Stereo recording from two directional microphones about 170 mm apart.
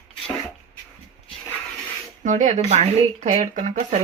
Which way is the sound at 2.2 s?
45° right (ahead or behind).